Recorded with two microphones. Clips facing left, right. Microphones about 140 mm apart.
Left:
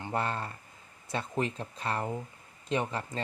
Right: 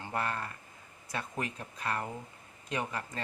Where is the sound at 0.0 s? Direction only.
25° left (ahead or behind).